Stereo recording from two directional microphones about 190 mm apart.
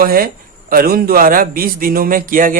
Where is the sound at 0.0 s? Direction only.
50° right (ahead or behind).